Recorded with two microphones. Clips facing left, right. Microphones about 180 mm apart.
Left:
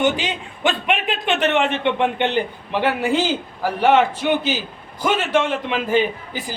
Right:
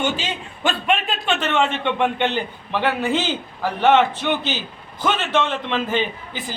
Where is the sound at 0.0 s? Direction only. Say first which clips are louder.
Left 4 dB; 15° left (ahead or behind).